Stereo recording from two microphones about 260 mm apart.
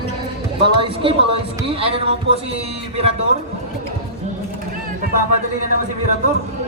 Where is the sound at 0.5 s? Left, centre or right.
Centre.